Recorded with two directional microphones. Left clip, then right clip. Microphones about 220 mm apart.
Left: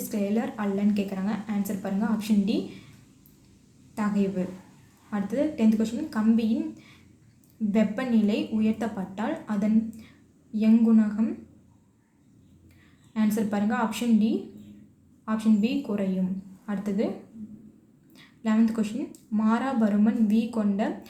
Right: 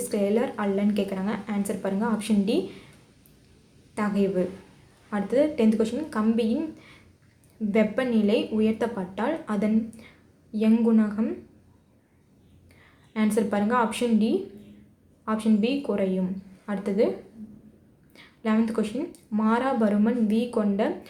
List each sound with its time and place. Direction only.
0.1 s a woman's voice: 20° right (ahead or behind)
3.9 s a woman's voice: 20° right (ahead or behind)
13.1 s a woman's voice: 20° right (ahead or behind)
18.1 s a woman's voice: 20° right (ahead or behind)